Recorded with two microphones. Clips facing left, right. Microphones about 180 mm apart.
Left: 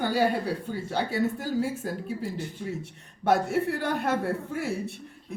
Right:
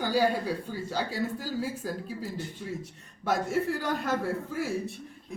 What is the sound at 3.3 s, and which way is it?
Speech, 65° left (ahead or behind).